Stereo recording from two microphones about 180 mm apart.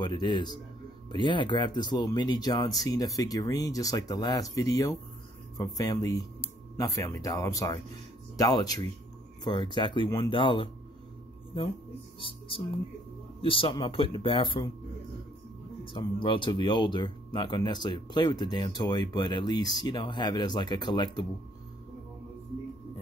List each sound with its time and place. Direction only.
0.0 s speech: 25° left (ahead or behind)
12.2 s speech: 30° left (ahead or behind)
15.8 s speech: 30° left (ahead or behind)